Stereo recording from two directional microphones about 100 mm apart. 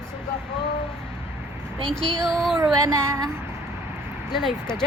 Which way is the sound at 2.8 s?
30° right (ahead or behind).